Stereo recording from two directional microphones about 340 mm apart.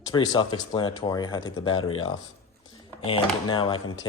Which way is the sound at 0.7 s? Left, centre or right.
Centre.